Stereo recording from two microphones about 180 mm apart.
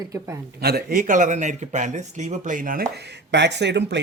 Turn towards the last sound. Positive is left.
turn(degrees=-75)  # may be behind; listen again after turning